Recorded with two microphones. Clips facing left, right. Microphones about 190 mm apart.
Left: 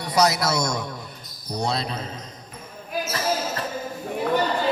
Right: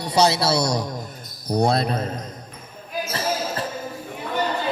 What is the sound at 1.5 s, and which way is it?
Speech, 55° right (ahead or behind).